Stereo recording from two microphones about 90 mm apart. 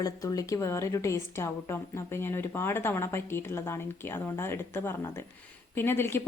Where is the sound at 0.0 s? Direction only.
40° left (ahead or behind).